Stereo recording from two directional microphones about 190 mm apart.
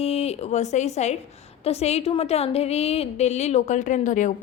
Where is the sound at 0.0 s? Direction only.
30° left (ahead or behind).